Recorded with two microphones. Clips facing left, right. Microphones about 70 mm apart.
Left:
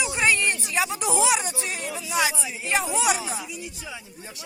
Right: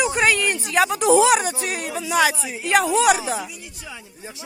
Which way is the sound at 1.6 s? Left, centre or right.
Right.